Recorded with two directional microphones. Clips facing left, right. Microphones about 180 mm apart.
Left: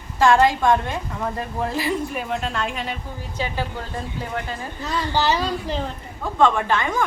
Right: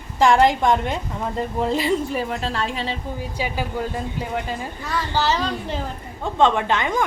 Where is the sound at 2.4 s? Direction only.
35° right (ahead or behind).